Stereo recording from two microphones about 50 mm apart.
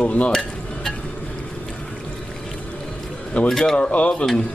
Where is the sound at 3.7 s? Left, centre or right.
Left.